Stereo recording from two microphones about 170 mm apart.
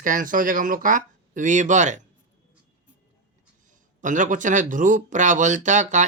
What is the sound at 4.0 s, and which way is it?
Speech, 50° right (ahead or behind).